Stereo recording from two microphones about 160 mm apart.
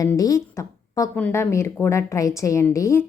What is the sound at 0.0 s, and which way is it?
A woman's voice, 20° left (ahead or behind).